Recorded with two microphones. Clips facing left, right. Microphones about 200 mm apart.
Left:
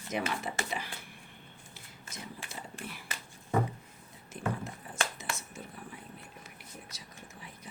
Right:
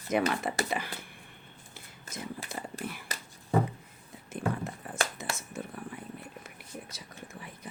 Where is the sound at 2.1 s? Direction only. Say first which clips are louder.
Right 6 dB; 35° right (ahead or behind).